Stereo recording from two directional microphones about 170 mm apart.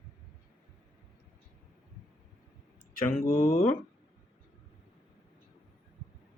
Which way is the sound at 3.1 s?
55° left (ahead or behind).